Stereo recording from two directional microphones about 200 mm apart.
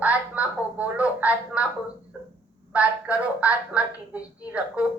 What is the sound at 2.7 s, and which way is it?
A woman's voice, 5° right (ahead or behind).